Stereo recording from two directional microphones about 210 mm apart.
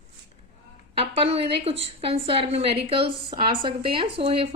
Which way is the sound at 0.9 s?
25° right (ahead or behind).